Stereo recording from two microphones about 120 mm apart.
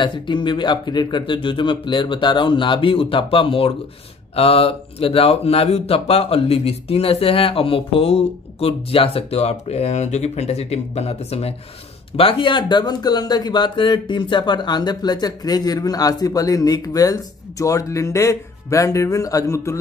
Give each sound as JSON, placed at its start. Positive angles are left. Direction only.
{"t": 0.0, "sound": "speech", "side_deg": 40}
{"t": 12.2, "sound": "speech", "side_deg": 45}